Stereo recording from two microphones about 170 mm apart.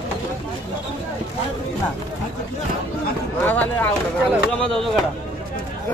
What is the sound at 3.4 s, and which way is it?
Speech, 10° left (ahead or behind).